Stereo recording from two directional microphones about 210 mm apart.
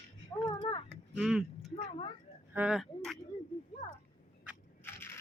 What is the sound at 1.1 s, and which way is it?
Speech, centre (ahead or behind).